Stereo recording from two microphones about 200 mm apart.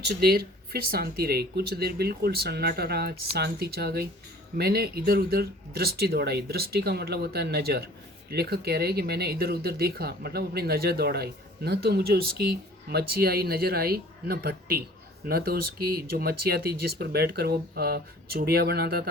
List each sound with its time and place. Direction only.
0.0 s speech: 55° right (ahead or behind)